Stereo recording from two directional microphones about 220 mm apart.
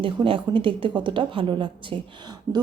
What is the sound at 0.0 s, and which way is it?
Speech, 25° right (ahead or behind).